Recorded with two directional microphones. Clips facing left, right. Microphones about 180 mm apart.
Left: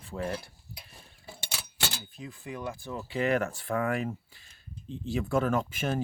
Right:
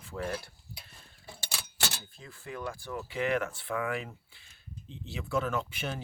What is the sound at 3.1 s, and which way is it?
Speech, 40° left (ahead or behind).